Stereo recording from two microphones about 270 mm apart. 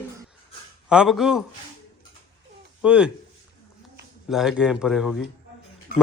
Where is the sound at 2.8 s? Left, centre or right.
Centre.